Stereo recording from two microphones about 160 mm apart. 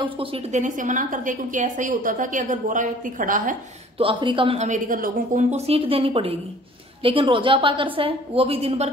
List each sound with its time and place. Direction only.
0.0 s a woman's voice: 35° right (ahead or behind)
0.6 s a woman's voice: 55° right (ahead or behind)
4.0 s a woman's voice: 30° right (ahead or behind)
4.6 s a woman's voice: 55° right (ahead or behind)
5.5 s a woman's voice: 40° right (ahead or behind)